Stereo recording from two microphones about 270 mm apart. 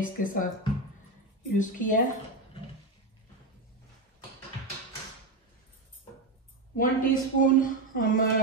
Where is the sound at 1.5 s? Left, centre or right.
Left.